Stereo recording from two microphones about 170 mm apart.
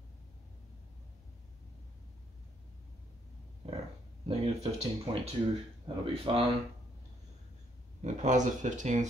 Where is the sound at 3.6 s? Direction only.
35° right (ahead or behind).